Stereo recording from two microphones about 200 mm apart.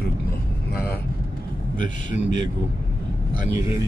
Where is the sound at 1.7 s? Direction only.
40° left (ahead or behind).